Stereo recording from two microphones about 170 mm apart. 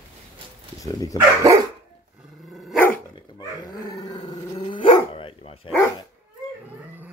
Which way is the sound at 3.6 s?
25° left (ahead or behind).